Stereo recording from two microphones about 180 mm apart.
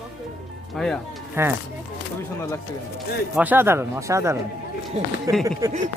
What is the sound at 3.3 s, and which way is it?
Speech, 10° right (ahead or behind).